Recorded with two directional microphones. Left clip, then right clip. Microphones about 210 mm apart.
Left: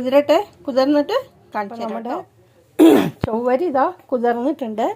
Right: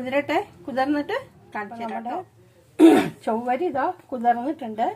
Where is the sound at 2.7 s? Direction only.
45° left (ahead or behind).